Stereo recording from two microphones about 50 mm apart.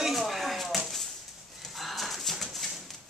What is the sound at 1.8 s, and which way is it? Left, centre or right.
Bird, centre.